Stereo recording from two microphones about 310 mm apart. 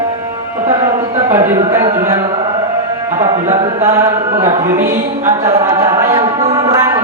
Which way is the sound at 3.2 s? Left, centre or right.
Right.